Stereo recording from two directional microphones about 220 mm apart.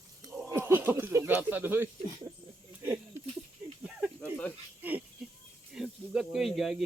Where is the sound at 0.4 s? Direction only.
10° right (ahead or behind).